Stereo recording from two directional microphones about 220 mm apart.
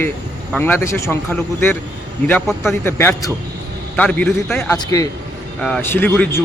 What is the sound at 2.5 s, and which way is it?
Speech, centre (ahead or behind).